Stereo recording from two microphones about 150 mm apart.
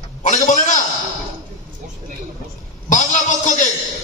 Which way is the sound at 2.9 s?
55° left (ahead or behind).